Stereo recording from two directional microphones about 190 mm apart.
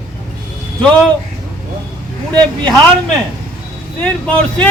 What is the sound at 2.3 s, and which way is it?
Speech, 5° left (ahead or behind).